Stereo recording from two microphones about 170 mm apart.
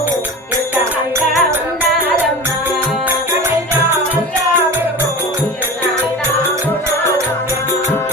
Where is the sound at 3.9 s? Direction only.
10° right (ahead or behind).